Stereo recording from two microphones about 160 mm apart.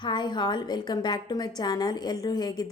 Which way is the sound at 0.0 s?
30° left (ahead or behind).